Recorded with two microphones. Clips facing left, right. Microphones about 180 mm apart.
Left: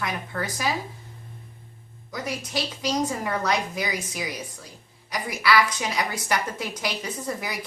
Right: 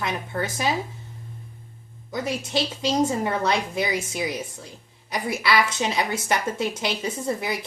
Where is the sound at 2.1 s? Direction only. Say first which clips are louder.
Right 4 dB; 25° right (ahead or behind).